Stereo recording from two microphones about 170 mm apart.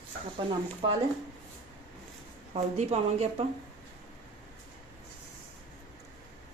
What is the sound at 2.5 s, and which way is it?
Speech, 40° right (ahead or behind).